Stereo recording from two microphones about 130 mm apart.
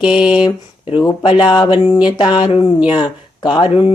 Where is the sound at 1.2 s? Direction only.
40° left (ahead or behind).